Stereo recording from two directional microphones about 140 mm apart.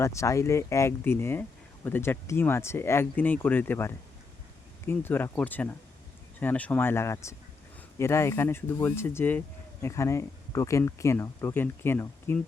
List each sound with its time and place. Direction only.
0.0 s speech: 20° left (ahead or behind)